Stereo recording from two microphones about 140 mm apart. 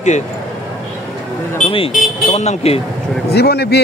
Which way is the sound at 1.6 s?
40° left (ahead or behind).